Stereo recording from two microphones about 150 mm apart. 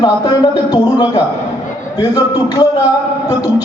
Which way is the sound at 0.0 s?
25° left (ahead or behind).